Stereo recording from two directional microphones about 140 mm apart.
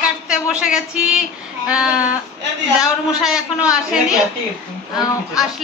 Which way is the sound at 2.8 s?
5° right (ahead or behind).